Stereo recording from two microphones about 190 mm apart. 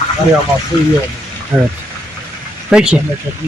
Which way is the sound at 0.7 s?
20° left (ahead or behind).